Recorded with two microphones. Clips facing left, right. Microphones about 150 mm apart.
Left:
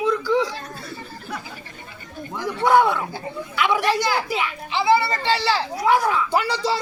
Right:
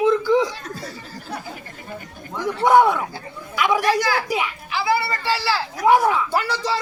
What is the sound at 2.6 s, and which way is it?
Speech, 15° right (ahead or behind).